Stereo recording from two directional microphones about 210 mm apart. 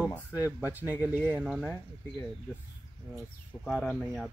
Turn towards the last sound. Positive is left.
turn(degrees=0)  # may be behind; listen again after turning